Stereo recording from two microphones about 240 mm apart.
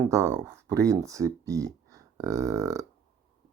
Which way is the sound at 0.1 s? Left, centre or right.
Centre.